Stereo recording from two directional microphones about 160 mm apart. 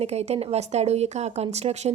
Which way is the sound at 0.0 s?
40° right (ahead or behind).